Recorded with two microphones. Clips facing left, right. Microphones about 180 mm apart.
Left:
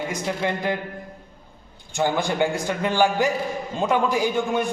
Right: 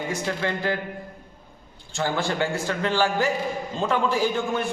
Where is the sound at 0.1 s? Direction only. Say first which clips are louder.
Left 1 dB; 15° left (ahead or behind).